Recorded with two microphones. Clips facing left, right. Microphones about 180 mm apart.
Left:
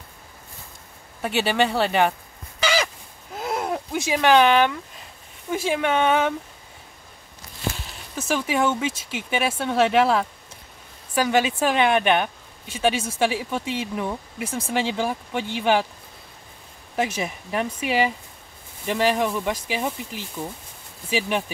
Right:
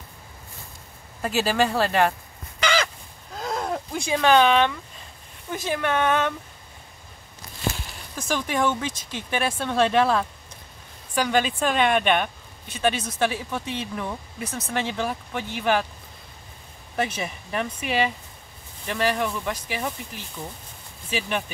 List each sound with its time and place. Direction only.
1.2 s speech: centre (ahead or behind)
2.6 s crow: 10° left (ahead or behind)
3.3 s a sound: 5° left (ahead or behind)
5.5 s speech: 10° left (ahead or behind)
8.2 s speech: 5° left (ahead or behind)
16.9 s speech: 10° left (ahead or behind)
21.1 s speech: 10° left (ahead or behind)